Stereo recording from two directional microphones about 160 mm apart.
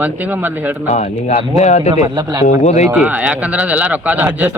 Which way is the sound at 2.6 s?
45° left (ahead or behind).